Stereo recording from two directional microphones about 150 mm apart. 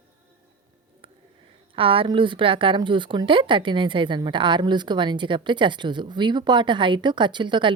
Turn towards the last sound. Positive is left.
turn(degrees=-30)  # may be behind; listen again after turning